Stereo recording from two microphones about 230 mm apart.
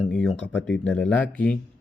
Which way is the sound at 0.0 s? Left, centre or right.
Centre.